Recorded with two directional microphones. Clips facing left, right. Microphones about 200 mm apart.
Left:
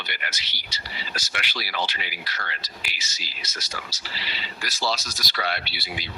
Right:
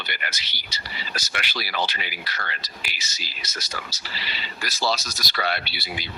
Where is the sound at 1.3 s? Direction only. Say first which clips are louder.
Right 2 dB; 50° right (ahead or behind).